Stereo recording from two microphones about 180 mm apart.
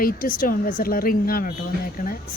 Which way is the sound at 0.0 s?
55° left (ahead or behind).